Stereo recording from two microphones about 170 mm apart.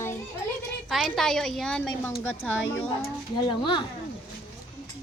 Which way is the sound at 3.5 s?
25° left (ahead or behind).